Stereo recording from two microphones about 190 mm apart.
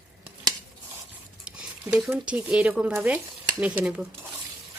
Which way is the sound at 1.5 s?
5° right (ahead or behind).